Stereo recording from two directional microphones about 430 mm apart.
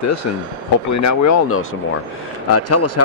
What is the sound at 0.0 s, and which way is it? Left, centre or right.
Speech, left.